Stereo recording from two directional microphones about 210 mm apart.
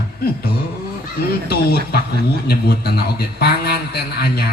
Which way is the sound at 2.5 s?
50° left (ahead or behind).